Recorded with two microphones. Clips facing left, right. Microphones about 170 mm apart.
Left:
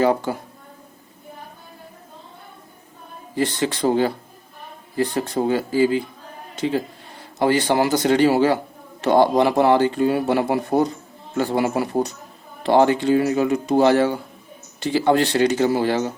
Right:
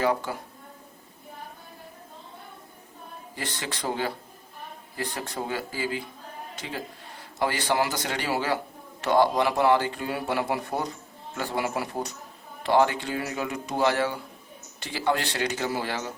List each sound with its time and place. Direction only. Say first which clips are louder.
0.0 s speech: left 7 dB; 30° left (ahead or behind)
3.3 s speech: left 13 dB; 25° left (ahead or behind)